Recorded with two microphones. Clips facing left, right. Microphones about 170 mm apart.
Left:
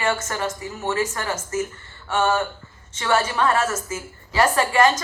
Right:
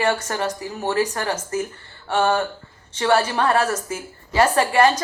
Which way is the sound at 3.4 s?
60° right (ahead or behind).